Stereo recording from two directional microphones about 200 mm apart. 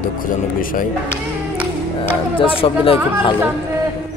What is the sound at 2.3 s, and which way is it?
Speech, 25° left (ahead or behind).